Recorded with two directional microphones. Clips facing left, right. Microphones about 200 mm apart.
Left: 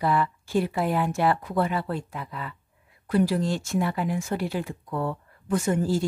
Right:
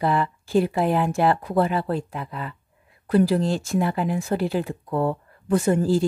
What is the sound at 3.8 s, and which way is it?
A woman's voice, 35° right (ahead or behind).